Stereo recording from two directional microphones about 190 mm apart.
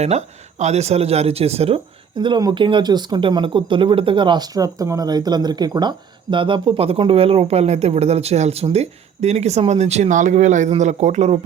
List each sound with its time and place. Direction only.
0.0 s speech: 35° right (ahead or behind)